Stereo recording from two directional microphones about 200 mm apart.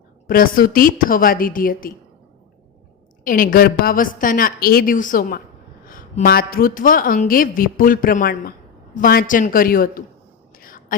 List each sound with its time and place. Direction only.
0.3 s a woman's voice: 45° left (ahead or behind)
3.2 s a woman's voice: 45° left (ahead or behind)
10.5 s a sound: 45° left (ahead or behind)